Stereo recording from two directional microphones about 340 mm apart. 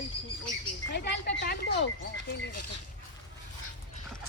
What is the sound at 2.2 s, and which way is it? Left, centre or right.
Speech, left.